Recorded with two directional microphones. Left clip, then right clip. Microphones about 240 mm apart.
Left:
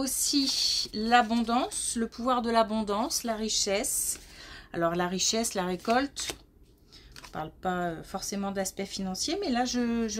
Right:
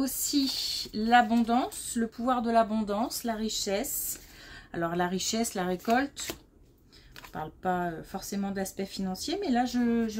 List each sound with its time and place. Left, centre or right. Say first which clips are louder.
0.0 s speech: left 1 dB; left
7.3 s speech: right 1 dB; left